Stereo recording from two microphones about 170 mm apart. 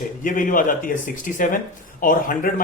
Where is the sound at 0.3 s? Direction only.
50° left (ahead or behind).